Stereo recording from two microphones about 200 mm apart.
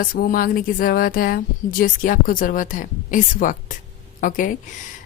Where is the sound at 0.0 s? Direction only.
45° left (ahead or behind).